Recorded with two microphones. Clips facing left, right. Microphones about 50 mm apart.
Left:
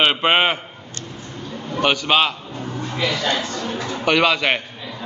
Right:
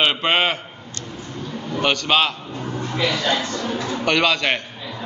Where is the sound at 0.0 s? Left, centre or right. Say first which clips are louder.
Left 2 dB; centre.